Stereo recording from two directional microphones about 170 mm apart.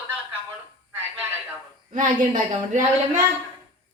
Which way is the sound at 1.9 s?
50° right (ahead or behind).